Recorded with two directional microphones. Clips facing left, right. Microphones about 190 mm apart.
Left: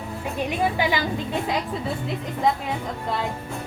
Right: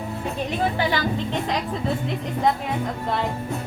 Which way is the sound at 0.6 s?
15° left (ahead or behind).